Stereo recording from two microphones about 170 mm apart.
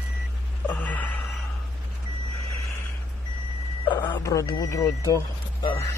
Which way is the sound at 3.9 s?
25° left (ahead or behind).